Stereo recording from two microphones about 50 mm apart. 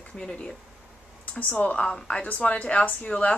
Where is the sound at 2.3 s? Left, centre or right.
Left.